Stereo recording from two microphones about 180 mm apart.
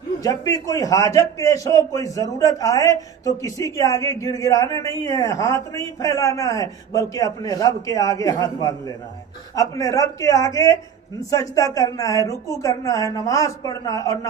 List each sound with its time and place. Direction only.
0.2 s a man's voice: 20° left (ahead or behind)